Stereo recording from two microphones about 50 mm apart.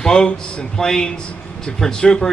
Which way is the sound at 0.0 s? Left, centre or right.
Centre.